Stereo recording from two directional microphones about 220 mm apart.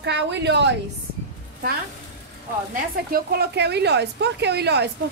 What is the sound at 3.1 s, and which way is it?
A woman's voice, 45° right (ahead or behind).